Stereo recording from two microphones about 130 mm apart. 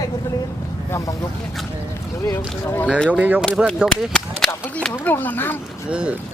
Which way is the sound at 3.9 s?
5° left (ahead or behind).